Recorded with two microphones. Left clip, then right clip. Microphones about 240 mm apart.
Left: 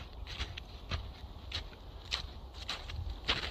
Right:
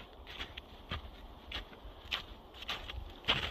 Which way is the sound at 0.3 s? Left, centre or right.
Centre.